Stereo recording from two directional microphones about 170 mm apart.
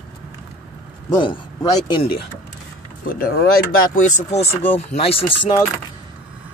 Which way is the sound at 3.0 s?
60° left (ahead or behind).